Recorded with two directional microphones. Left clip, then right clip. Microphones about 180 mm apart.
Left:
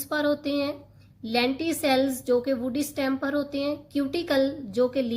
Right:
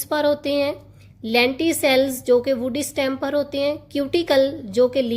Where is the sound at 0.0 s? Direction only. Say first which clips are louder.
Right 6 dB; 35° right (ahead or behind).